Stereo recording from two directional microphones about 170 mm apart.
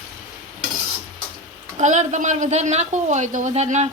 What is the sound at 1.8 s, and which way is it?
Speech, 45° right (ahead or behind).